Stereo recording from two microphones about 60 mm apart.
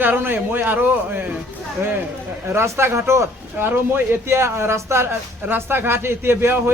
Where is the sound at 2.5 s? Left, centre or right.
Right.